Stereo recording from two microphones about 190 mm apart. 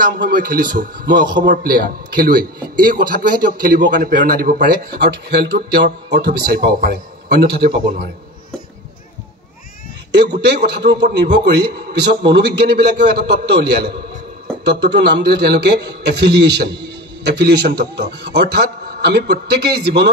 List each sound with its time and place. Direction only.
0.0 s a man's voice: 45° right (ahead or behind)
10.4 s a man's voice: 60° right (ahead or behind)